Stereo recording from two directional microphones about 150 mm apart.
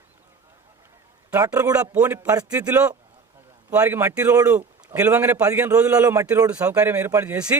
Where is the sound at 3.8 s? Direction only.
20° right (ahead or behind).